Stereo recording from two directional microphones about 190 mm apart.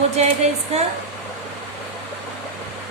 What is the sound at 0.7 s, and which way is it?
Speech, 35° right (ahead or behind).